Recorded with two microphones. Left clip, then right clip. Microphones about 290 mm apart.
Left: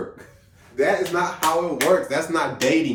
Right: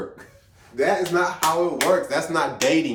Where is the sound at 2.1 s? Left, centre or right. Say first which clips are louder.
Even; centre.